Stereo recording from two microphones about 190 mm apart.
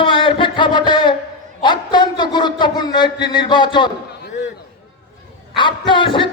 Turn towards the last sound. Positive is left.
turn(degrees=25)  # may be behind; listen again after turning